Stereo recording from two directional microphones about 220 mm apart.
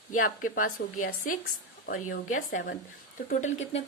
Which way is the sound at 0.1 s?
40° left (ahead or behind).